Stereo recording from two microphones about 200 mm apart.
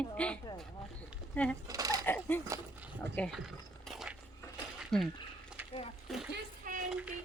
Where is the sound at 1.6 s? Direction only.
15° right (ahead or behind).